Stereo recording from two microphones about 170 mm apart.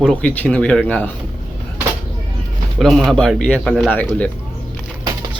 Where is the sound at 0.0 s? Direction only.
5° left (ahead or behind).